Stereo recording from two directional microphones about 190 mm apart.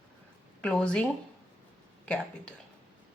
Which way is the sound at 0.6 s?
5° left (ahead or behind).